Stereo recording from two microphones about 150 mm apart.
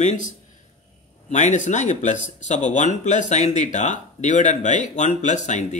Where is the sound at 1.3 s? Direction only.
55° left (ahead or behind).